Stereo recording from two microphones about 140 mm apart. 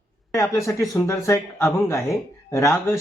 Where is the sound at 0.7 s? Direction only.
20° left (ahead or behind).